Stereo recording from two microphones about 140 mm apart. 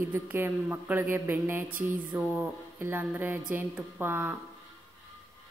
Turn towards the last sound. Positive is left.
turn(degrees=-15)  # may be behind; listen again after turning